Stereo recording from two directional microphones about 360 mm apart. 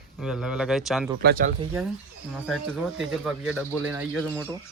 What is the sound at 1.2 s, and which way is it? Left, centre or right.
Speech, right.